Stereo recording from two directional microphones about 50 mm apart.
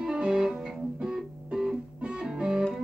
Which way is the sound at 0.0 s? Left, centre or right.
Centre.